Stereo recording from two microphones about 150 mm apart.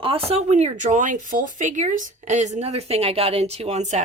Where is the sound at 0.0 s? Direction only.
40° right (ahead or behind).